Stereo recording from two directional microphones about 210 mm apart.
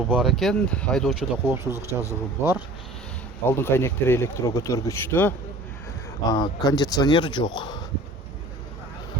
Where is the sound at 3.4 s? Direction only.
10° left (ahead or behind).